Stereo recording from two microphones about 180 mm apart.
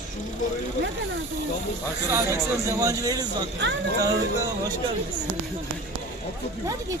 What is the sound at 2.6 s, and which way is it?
Speech, 20° right (ahead or behind).